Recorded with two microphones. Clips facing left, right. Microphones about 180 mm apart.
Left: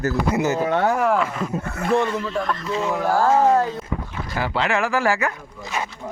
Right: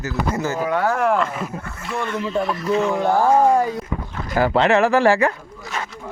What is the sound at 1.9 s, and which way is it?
Speech, 30° left (ahead or behind).